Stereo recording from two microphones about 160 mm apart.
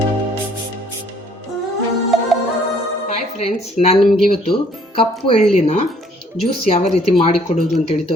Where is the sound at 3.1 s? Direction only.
40° left (ahead or behind).